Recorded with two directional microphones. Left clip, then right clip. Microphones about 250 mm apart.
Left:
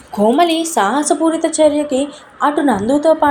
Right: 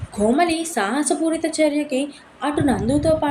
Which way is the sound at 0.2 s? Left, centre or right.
Centre.